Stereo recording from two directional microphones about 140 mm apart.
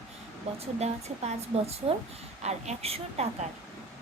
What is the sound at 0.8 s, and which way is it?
A woman's voice, 50° right (ahead or behind).